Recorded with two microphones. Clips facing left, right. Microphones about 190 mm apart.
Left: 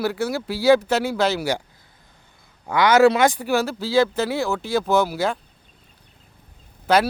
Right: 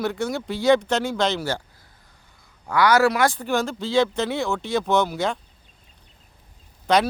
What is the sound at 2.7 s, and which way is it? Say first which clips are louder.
Speech: left 3 dB; 20° left (ahead or behind).